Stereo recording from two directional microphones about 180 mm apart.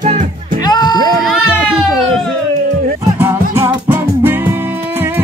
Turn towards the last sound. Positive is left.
turn(degrees=-15)  # may be behind; listen again after turning